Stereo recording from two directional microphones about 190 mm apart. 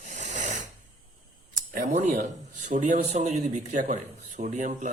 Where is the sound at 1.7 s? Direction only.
45° right (ahead or behind).